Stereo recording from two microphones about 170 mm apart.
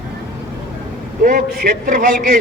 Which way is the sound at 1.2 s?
55° right (ahead or behind).